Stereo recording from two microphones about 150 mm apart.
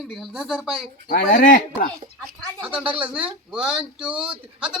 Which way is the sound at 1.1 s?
60° left (ahead or behind).